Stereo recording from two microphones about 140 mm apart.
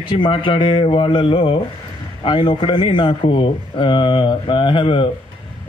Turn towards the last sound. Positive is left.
turn(degrees=35)  # may be behind; listen again after turning